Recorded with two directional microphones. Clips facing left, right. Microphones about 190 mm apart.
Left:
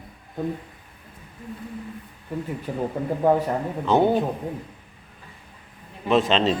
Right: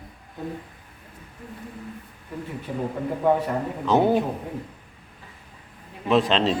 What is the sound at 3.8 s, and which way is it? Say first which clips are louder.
Speech: even; 5° right (ahead or behind).